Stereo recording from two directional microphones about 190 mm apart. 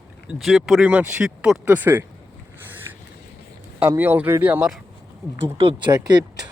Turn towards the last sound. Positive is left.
turn(degrees=-20)  # may be behind; listen again after turning